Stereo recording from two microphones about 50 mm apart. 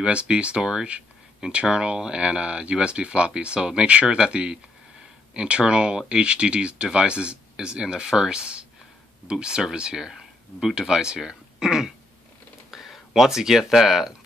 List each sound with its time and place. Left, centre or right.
0.0 s speech: right; by 14.1 s centre